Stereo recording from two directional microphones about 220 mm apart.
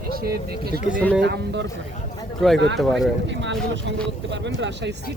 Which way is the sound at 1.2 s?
50° right (ahead or behind).